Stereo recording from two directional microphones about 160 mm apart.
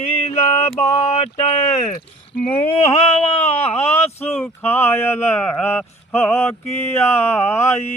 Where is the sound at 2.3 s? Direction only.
10° left (ahead or behind).